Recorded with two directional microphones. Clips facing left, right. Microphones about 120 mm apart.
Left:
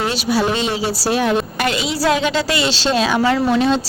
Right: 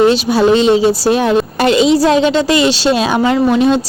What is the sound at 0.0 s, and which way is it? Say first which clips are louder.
Speech: right 8 dB; 25° right (ahead or behind).